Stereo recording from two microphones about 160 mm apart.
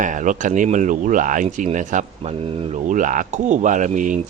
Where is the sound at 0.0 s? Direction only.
55° right (ahead or behind); by 2.7 s 35° right (ahead or behind).